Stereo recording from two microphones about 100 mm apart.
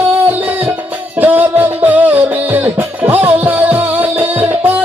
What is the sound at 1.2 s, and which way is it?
Music, 20° right (ahead or behind).